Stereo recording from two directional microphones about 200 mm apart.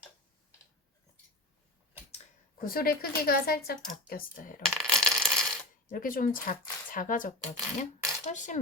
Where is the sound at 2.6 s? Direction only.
45° left (ahead or behind).